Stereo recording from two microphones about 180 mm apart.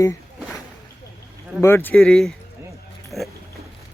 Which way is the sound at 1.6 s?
10° left (ahead or behind).